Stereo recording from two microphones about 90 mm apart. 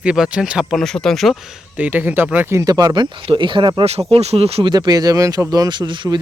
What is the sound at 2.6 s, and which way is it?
Speech, 45° right (ahead or behind).